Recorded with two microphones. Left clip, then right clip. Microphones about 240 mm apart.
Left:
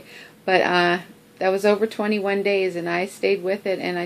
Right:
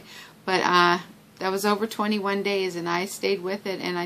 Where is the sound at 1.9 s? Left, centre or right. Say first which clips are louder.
Left 3 dB; right.